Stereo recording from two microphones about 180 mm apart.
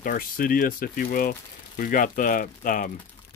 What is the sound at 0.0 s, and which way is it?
Speech, 50° left (ahead or behind).